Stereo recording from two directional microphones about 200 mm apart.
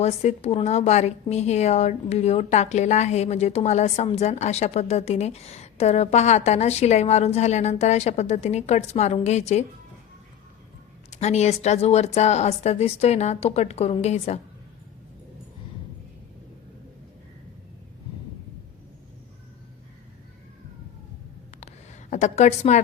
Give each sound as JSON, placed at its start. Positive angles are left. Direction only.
{"t": 0.0, "sound": "a woman's voice", "side_deg": 35}
{"t": 11.2, "sound": "a woman's voice", "side_deg": 35}
{"t": 22.1, "sound": "a woman's voice", "side_deg": 35}